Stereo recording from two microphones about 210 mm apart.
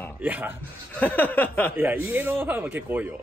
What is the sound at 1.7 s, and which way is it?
Speech, 10° right (ahead or behind).